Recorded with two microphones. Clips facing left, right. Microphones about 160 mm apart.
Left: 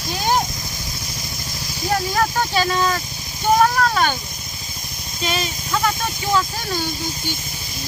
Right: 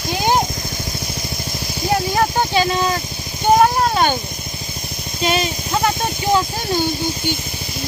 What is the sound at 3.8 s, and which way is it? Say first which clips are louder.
Vehicle: right 2 dB; 30° right (ahead or behind).